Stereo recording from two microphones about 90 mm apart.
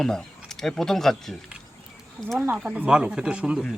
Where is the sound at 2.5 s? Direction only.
10° right (ahead or behind).